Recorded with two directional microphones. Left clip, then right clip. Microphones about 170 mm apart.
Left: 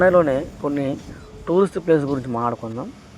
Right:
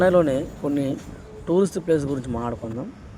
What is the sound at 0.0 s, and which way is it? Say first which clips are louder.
Speech: left 3 dB; 25° right (ahead or behind).